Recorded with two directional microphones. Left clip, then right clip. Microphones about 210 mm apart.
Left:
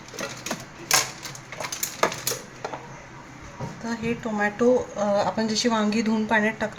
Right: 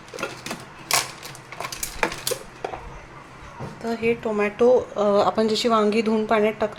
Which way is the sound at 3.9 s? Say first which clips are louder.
Right 6 dB; 30° right (ahead or behind).